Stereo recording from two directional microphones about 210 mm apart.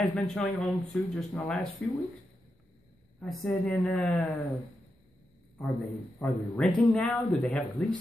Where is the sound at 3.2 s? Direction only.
5° left (ahead or behind).